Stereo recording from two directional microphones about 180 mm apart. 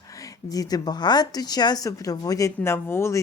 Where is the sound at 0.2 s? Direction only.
20° left (ahead or behind).